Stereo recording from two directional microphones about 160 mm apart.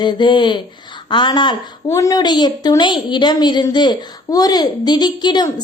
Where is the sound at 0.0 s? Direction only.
30° left (ahead or behind).